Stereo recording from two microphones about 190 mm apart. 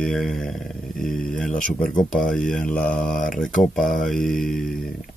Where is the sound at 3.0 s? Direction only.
50° left (ahead or behind).